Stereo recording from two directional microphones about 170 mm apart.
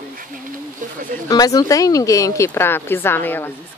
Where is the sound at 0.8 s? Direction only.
50° right (ahead or behind).